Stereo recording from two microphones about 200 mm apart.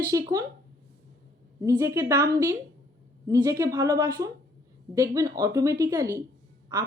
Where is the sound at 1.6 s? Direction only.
15° right (ahead or behind).